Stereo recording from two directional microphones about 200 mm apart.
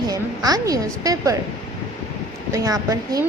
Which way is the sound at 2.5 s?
15° right (ahead or behind).